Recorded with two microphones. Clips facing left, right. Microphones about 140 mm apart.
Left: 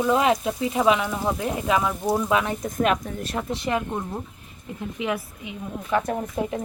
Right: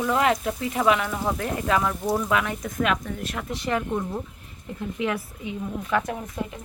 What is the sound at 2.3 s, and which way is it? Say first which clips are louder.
Speech: left 2 dB; 25° left (ahead or behind).